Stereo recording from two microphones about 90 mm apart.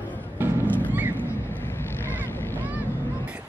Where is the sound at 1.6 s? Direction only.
25° left (ahead or behind).